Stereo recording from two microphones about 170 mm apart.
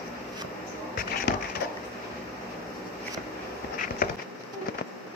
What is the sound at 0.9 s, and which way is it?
Music, 55° left (ahead or behind).